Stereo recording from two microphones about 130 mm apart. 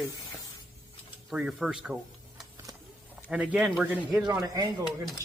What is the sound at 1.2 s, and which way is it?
Speech, 5° right (ahead or behind).